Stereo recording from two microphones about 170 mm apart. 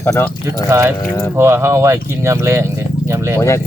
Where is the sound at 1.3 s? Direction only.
15° right (ahead or behind).